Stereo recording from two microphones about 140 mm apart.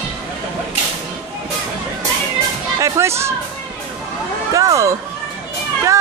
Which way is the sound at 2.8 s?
20° right (ahead or behind).